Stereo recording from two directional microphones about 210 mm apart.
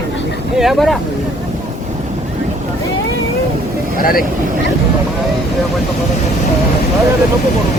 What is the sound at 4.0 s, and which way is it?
Speech, 45° left (ahead or behind).